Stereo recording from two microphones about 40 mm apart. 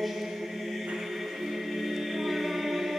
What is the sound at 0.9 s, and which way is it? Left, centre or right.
A capella, centre.